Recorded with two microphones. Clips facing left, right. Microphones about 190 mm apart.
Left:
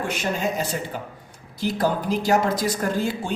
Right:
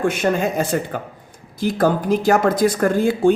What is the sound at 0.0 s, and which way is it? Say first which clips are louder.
Speech: right 7 dB; 55° right (ahead or behind).